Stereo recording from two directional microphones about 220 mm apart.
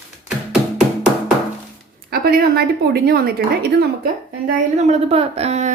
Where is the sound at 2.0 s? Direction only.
45° right (ahead or behind).